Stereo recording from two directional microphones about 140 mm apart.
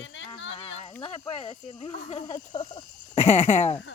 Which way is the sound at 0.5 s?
40° left (ahead or behind).